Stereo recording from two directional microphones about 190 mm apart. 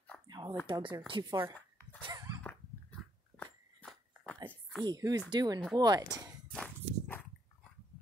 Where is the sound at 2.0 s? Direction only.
20° right (ahead or behind).